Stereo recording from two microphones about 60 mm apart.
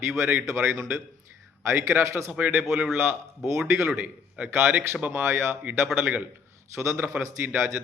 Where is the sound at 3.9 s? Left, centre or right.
Right.